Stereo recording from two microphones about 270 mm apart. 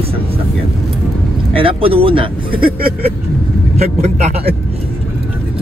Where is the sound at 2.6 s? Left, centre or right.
Right.